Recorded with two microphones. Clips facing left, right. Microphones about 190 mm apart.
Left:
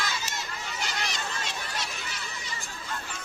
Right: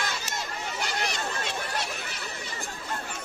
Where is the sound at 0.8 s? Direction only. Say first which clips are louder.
Right 3 dB; 50° right (ahead or behind).